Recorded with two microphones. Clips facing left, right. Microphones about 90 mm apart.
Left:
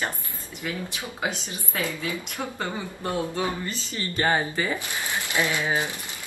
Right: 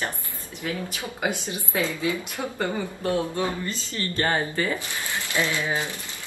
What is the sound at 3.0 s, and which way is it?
A woman's voice, 20° left (ahead or behind).